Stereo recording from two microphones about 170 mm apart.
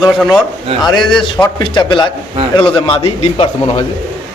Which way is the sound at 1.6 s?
25° left (ahead or behind).